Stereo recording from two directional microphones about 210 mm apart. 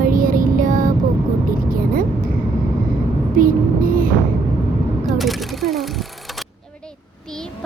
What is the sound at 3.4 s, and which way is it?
Music, 40° right (ahead or behind).